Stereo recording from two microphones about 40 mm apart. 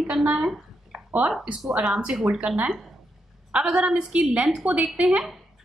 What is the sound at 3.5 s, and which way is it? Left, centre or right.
A woman's voice, right.